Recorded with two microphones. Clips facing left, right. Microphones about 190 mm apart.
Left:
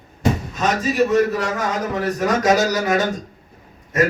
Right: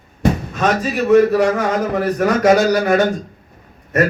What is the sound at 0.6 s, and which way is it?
A man's voice, 60° right (ahead or behind).